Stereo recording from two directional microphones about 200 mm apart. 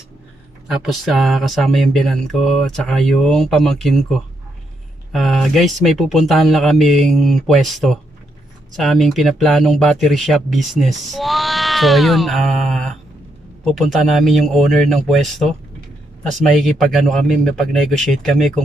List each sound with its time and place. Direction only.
0.7 s speech: centre (ahead or behind)
5.1 s speech: centre (ahead or behind)